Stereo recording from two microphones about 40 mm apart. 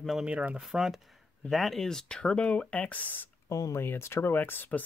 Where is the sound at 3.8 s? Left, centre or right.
Left.